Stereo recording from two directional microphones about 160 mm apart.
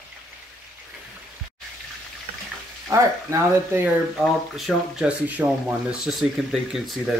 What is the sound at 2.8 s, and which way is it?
Speech, 20° right (ahead or behind).